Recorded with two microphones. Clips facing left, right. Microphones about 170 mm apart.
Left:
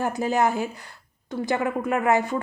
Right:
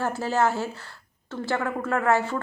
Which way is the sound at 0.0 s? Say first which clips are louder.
Left 1 dB; 15° left (ahead or behind).